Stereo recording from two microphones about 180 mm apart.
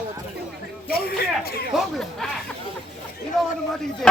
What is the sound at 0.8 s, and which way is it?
Speech, 60° left (ahead or behind).